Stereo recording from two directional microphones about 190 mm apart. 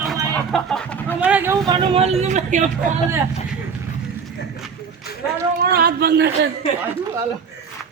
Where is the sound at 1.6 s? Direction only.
25° right (ahead or behind).